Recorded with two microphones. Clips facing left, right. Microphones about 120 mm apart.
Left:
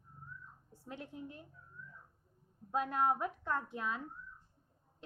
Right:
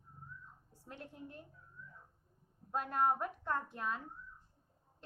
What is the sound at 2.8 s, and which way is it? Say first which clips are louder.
A woman's voice: left 1 dB; 45° right (ahead or behind).